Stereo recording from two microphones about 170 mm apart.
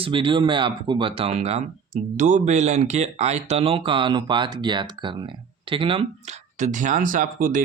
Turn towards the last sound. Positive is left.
turn(degrees=-50)  # may be behind; listen again after turning